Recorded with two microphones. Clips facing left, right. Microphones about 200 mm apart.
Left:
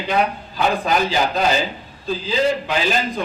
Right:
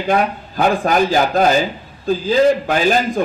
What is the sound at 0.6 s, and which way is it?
Speech, 50° right (ahead or behind).